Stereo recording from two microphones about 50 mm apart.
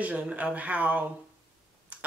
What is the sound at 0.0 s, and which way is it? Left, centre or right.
Speech, right.